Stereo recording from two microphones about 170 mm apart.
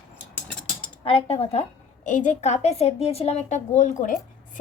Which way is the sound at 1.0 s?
35° left (ahead or behind).